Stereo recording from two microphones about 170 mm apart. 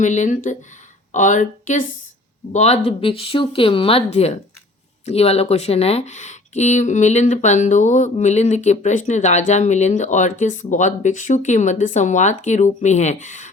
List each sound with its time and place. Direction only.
0.0 s speech: 45° left (ahead or behind)